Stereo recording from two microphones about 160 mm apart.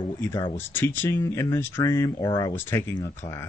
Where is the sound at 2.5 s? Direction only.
15° left (ahead or behind).